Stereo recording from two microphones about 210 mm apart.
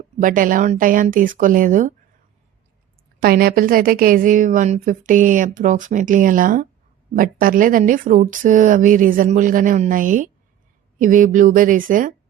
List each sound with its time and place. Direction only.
0.2 s a woman's voice: 40° right (ahead or behind)
3.2 s a woman's voice: 45° right (ahead or behind)